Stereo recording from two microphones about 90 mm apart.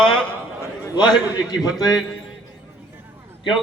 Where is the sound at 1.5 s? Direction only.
50° left (ahead or behind).